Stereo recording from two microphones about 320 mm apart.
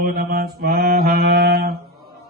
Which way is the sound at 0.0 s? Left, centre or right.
Right.